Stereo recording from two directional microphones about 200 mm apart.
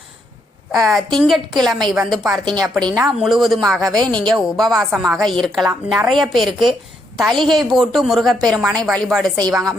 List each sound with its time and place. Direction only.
0.7 s a woman's voice: centre (ahead or behind)
2.6 s a woman's voice: 20° right (ahead or behind)
2.9 s a woman's voice: 5° right (ahead or behind)